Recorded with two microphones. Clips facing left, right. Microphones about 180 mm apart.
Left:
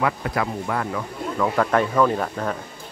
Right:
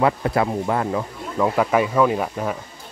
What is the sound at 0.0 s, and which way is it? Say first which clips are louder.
Speech: right 4 dB; 30° right (ahead or behind).